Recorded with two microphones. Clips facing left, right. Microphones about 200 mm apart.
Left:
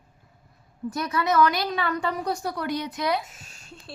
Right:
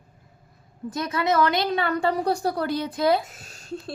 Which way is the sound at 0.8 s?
20° right (ahead or behind).